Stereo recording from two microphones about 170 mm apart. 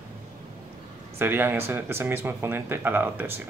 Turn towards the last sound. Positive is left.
turn(degrees=-10)  # may be behind; listen again after turning